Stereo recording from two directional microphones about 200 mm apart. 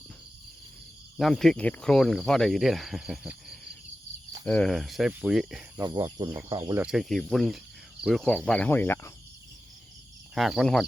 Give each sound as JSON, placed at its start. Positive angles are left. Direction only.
{"t": 1.1, "sound": "speech", "side_deg": 0}
{"t": 5.8, "sound": "speech", "side_deg": -20}
{"t": 6.8, "sound": "speech", "side_deg": 0}
{"t": 10.3, "sound": "speech", "side_deg": 0}